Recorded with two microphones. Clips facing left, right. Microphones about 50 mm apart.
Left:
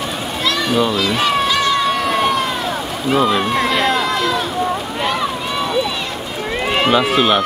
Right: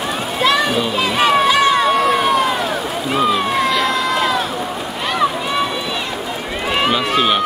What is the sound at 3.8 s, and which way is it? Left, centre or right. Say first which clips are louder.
Crowd: left 1 dB; centre.